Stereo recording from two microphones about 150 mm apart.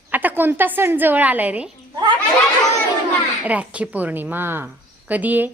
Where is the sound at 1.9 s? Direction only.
30° right (ahead or behind).